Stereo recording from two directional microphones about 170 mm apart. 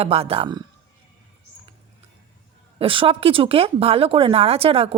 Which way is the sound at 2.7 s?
30° right (ahead or behind).